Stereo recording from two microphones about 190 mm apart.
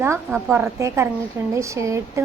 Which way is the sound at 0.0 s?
10° right (ahead or behind).